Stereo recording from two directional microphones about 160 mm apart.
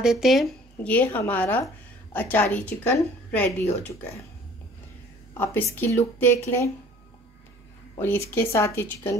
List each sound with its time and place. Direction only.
0.0 s speech: 5° right (ahead or behind)
5.8 s speech: 15° left (ahead or behind)
8.0 s speech: 15° left (ahead or behind)